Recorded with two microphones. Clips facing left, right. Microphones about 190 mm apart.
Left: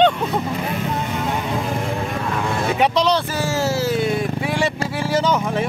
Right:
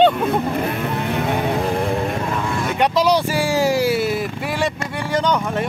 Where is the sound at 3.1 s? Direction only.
15° right (ahead or behind).